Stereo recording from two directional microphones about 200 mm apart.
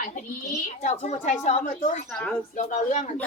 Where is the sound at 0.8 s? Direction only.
35° left (ahead or behind).